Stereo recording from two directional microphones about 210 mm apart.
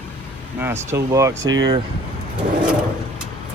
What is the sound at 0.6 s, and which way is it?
Speech, 10° right (ahead or behind).